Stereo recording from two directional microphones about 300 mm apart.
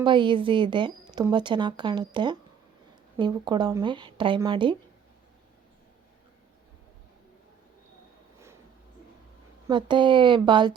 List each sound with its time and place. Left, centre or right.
0.0 s a woman's voice: centre
9.6 s a woman's voice: centre